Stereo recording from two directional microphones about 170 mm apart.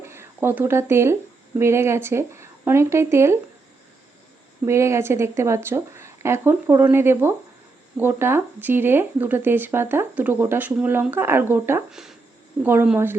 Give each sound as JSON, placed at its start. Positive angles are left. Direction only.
{"t": 0.0, "sound": "speech", "side_deg": -15}
{"t": 4.6, "sound": "speech", "side_deg": -15}